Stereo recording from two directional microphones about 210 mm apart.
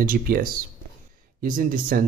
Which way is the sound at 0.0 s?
45° right (ahead or behind).